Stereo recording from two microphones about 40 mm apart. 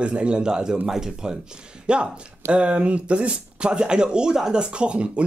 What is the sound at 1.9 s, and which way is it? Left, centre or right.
Speech, right.